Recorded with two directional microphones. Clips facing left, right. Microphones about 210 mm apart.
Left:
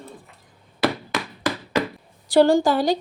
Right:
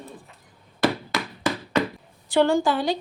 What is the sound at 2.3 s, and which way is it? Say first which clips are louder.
Speech: left 4 dB; 35° left (ahead or behind).